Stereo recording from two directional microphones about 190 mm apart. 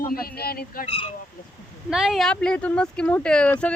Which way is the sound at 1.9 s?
Centre (ahead or behind).